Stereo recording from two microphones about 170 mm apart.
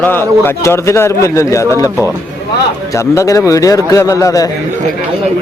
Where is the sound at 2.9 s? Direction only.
20° left (ahead or behind).